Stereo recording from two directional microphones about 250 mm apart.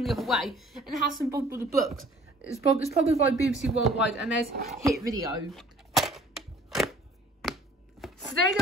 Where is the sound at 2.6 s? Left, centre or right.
Left.